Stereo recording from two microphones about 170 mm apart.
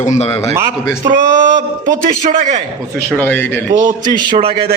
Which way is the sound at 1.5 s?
50° right (ahead or behind).